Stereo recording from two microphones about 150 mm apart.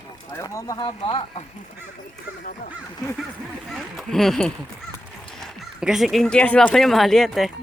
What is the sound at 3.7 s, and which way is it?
Speech, centre (ahead or behind).